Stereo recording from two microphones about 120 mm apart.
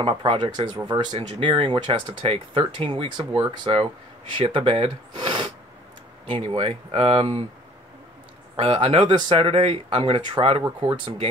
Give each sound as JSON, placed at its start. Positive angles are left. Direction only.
{"t": 0.0, "sound": "speech", "side_deg": -45}
{"t": 1.1, "sound": "speech", "side_deg": -50}
{"t": 8.5, "sound": "speech", "side_deg": -50}